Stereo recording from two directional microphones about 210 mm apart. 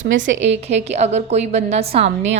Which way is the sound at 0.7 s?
30° right (ahead or behind).